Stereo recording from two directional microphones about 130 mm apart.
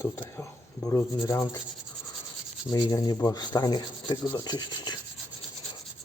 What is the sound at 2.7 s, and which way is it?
Rub, 30° left (ahead or behind).